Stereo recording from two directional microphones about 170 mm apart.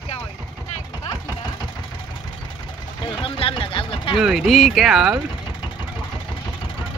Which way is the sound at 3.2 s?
30° left (ahead or behind).